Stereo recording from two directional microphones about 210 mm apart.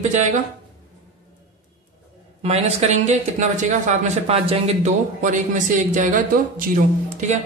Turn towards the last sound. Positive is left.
turn(degrees=-35)  # may be behind; listen again after turning